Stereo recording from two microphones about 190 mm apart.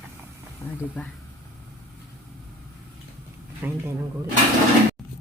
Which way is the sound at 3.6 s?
10° right (ahead or behind).